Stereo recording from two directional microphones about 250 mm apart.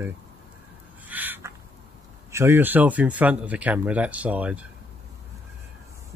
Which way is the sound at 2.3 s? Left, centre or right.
Centre.